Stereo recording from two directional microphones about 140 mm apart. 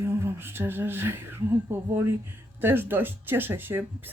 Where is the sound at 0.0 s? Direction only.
15° right (ahead or behind).